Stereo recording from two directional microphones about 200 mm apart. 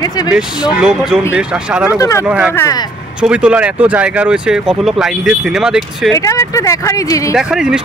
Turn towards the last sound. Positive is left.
turn(degrees=0)  # may be behind; listen again after turning